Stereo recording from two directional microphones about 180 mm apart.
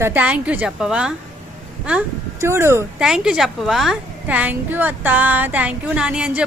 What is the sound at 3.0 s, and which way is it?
A woman's voice, 5° right (ahead or behind).